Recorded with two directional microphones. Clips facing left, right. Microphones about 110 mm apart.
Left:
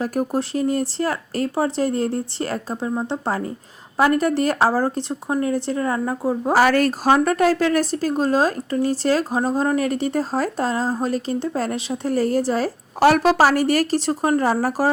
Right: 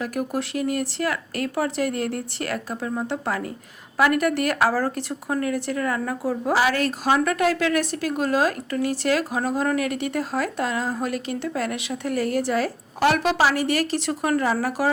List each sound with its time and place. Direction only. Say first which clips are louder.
0.0 s a woman's voice: left 4 dB; 35° left (ahead or behind)
6.5 s a woman's voice: left 5 dB; 45° left (ahead or behind)